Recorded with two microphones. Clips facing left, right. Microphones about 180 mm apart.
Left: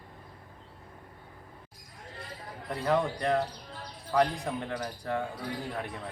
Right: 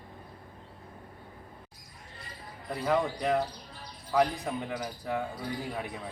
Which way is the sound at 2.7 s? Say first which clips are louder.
Even; 5° right (ahead or behind).